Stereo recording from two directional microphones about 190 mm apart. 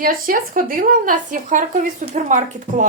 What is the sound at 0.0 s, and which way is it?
Speech, 50° right (ahead or behind).